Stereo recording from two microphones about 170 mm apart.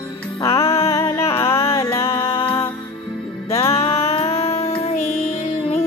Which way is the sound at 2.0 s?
35° left (ahead or behind).